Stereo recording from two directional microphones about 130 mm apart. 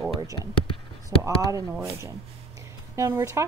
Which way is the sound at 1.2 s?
25° right (ahead or behind).